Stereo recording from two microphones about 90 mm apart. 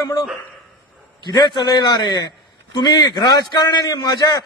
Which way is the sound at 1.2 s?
50° left (ahead or behind).